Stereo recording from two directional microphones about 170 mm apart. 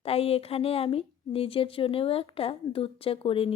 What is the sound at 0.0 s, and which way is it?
A woman's voice, 35° left (ahead or behind).